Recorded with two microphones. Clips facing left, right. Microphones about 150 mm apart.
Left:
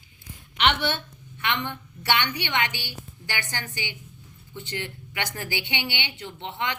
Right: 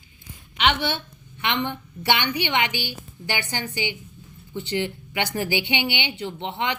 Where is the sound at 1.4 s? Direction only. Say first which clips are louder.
Right 3 dB; 20° right (ahead or behind).